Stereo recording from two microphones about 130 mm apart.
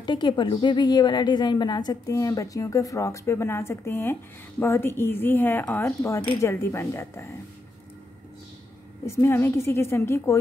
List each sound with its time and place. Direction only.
0.0 s a woman's voice: 35° left (ahead or behind); by 7.2 s 20° left (ahead or behind)
9.0 s a woman's voice: 20° left (ahead or behind)